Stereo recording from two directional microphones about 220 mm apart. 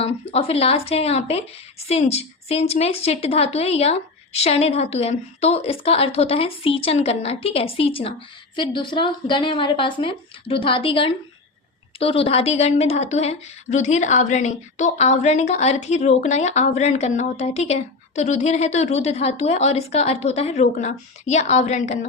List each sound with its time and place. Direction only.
0.0 s a woman's voice: 25° left (ahead or behind)